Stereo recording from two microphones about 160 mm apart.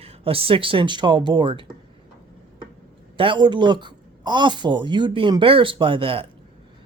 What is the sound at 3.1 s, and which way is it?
A woman's voice, 30° right (ahead or behind).